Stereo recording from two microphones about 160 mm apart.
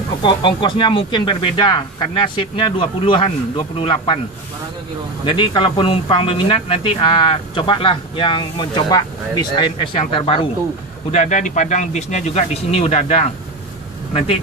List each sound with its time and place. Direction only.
0.2 s speech: 30° left (ahead or behind)
5.2 s speech: 30° left (ahead or behind)
11.1 s speech: 50° left (ahead or behind)